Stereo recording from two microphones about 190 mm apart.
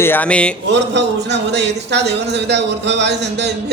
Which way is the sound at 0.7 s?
65° right (ahead or behind).